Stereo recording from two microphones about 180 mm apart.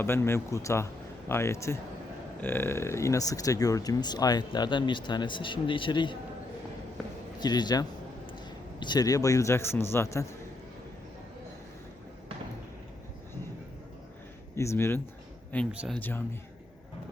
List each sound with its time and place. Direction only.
0.0 s speech: 15° left (ahead or behind)
7.3 s speech: 25° left (ahead or behind)
14.5 s speech: 15° left (ahead or behind)
15.7 s speech: 5° right (ahead or behind)
16.0 s speech: 10° left (ahead or behind)